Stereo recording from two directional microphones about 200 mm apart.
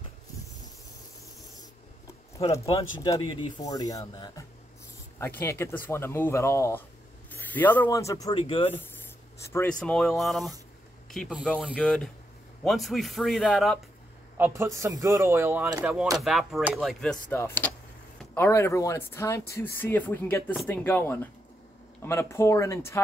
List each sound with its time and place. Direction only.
2.5 s speech: 15° left (ahead or behind)
9.5 s a man's voice: 10° left (ahead or behind)
14.3 s speech: 10° right (ahead or behind); by 22.9 s 15° left (ahead or behind)